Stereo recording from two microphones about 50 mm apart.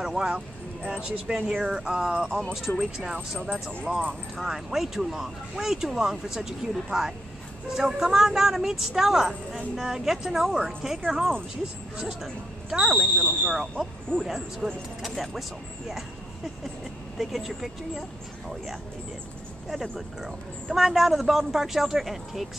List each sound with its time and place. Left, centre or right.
0.0 s speech: centre
1.3 s a woman's voice: centre
3.2 s speech: right
4.4 s a woman's voice: centre
13.5 s speech: centre
17.2 s speech: centre
19.7 s speech: centre